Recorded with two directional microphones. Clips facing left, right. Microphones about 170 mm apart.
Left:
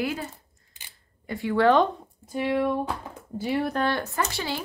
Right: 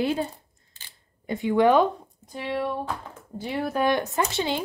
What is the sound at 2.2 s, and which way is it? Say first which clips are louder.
Speech: left 4 dB; 10° left (ahead or behind).